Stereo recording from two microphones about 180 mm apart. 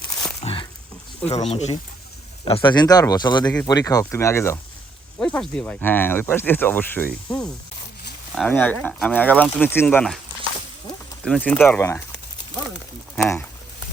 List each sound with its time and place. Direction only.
0.4 s wild animals: 30° left (ahead or behind)
1.3 s speech: 35° left (ahead or behind)
2.6 s speech: 20° left (ahead or behind); by 10.2 s 5° left (ahead or behind)
11.3 s speech: 5° left (ahead or behind)